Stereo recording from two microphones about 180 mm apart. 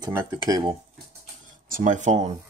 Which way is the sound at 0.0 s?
20° right (ahead or behind).